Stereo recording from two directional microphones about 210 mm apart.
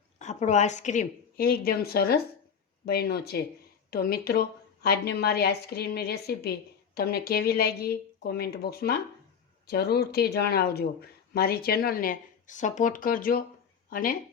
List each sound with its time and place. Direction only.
0.2 s a woman's voice: 35° left (ahead or behind)